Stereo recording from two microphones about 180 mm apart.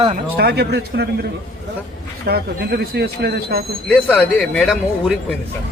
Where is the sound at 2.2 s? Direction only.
60° right (ahead or behind).